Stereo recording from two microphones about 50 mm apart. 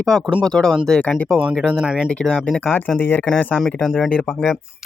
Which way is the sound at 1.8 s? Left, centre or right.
Centre.